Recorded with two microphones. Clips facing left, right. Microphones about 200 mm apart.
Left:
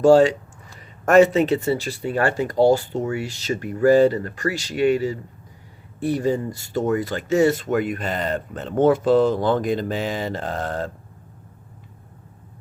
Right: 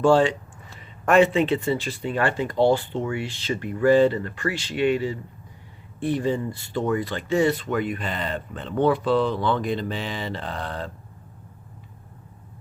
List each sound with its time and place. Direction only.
0.0 s speech: 40° left (ahead or behind)